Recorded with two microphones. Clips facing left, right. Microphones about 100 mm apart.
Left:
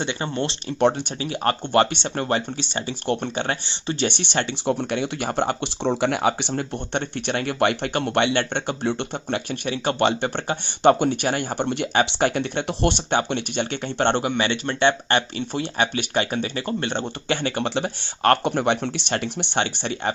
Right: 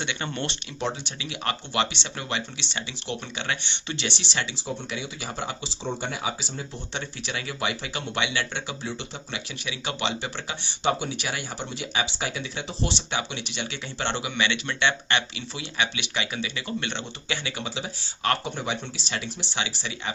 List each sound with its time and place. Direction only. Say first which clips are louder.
0.0 s speech: left 5 dB; 35° left (ahead or behind)
0.8 s speech: left 11 dB; 55° left (ahead or behind)
1.2 s speech: left 8 dB; 45° left (ahead or behind)